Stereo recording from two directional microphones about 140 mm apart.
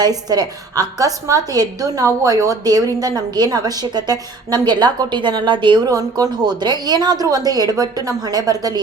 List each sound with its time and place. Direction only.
0.0 s a woman's voice: 30° right (ahead or behind)